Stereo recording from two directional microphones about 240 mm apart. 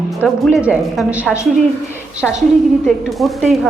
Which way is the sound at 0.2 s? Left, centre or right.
Centre.